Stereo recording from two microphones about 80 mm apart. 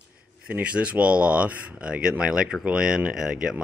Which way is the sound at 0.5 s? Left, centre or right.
Centre.